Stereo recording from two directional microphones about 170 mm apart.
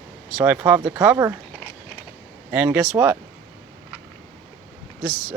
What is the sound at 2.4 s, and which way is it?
Speech, 10° right (ahead or behind).